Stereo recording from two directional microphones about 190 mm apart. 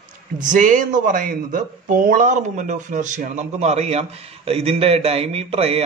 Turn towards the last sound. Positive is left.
turn(degrees=-30)  # may be behind; listen again after turning